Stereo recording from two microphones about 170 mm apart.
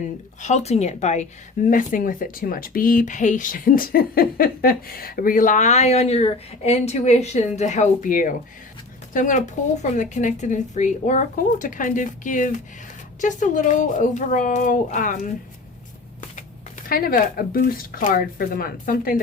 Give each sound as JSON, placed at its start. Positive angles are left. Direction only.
{"t": 0.4, "sound": "speech", "side_deg": 40}
{"t": 16.9, "sound": "speech", "side_deg": 55}